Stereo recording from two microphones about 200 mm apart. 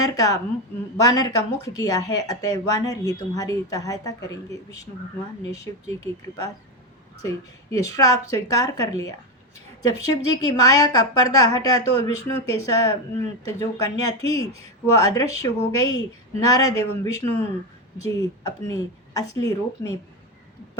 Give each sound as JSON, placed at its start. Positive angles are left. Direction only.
{"t": 0.0, "sound": "speech", "side_deg": 15}
{"t": 5.5, "sound": "speech", "side_deg": 15}
{"t": 10.2, "sound": "speech", "side_deg": 20}